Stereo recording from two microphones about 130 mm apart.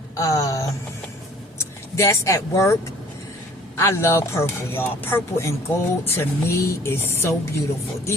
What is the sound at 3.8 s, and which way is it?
Speech, 20° left (ahead or behind).